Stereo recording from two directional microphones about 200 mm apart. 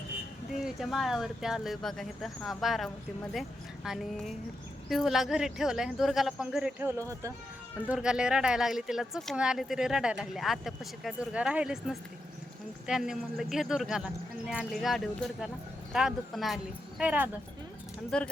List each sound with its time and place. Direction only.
0.6 s speech: centre (ahead or behind); by 7.3 s 15° right (ahead or behind)
7.9 s speech: 5° right (ahead or behind)
18.1 s speech: 5° left (ahead or behind)